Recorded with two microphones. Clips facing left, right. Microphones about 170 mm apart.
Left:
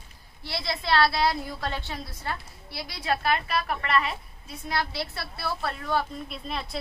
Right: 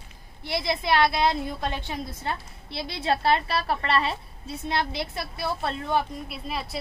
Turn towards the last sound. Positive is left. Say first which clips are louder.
# right 1 dB
turn(degrees=-5)  # may be behind; listen again after turning